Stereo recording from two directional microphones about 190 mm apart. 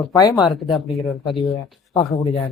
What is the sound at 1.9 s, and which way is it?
Speech, 20° left (ahead or behind).